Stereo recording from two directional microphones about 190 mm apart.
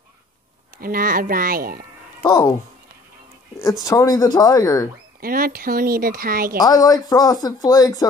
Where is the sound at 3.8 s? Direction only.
20° left (ahead or behind).